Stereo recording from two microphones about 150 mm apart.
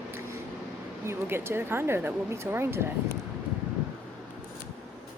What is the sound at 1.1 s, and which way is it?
Speech, 15° right (ahead or behind).